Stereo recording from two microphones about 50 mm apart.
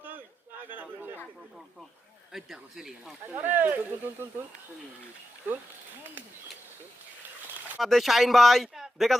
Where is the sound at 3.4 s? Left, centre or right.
Right.